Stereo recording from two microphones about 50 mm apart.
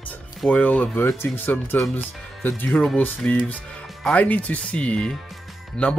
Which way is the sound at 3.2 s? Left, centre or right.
Left.